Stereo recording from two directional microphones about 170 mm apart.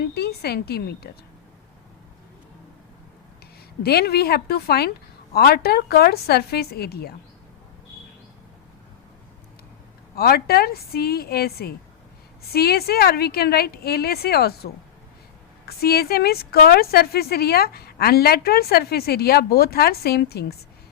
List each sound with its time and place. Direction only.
0.1 s speech: 70° left (ahead or behind)
3.8 s speech: 70° left (ahead or behind)
10.2 s speech: 65° left (ahead or behind)